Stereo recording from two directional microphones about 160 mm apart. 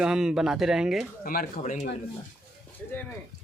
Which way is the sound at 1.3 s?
65° left (ahead or behind).